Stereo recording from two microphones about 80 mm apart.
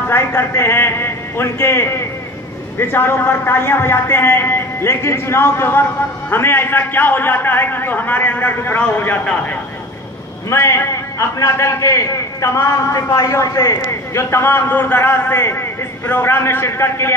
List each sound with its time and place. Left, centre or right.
0.1 s a man's voice: left
9.2 s speech: centre
10.5 s a man's voice: left